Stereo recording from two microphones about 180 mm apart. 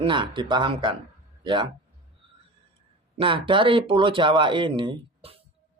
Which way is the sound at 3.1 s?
30° right (ahead or behind).